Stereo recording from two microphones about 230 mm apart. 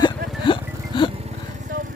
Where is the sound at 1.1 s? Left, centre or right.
Right.